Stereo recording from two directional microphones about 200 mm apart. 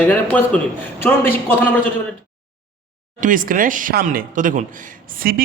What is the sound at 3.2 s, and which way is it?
A man's voice, 40° right (ahead or behind).